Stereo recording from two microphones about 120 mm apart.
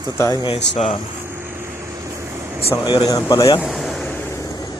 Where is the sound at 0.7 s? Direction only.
80° left.